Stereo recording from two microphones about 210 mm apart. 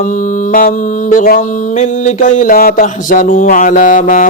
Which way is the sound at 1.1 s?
40° left (ahead or behind).